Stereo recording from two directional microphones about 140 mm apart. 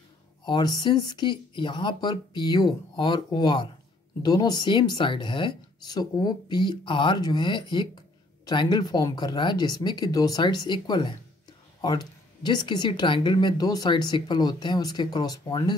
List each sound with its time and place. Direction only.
0.5 s speech: 30° left (ahead or behind)